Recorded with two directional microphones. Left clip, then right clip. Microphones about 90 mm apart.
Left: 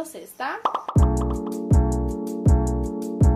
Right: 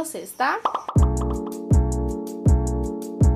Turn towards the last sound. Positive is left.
turn(degrees=0)  # may be behind; listen again after turning